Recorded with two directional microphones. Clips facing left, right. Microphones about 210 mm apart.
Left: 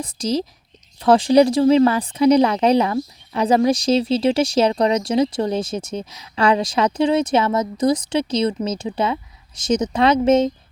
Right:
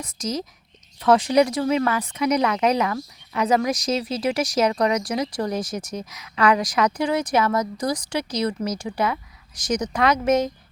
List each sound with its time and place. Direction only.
0.0 s speech: 30° left (ahead or behind)